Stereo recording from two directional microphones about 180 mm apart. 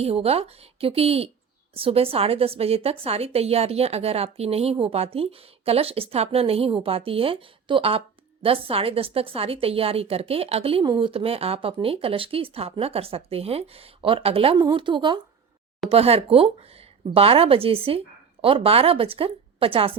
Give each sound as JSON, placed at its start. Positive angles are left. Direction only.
{"t": 0.0, "sound": "a woman's voice", "side_deg": -35}